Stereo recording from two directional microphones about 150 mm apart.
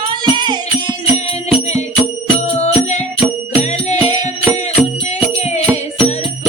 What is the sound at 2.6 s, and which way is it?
Music, 50° left (ahead or behind).